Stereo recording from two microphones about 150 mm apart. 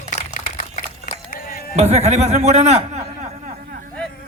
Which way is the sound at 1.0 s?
70° left (ahead or behind).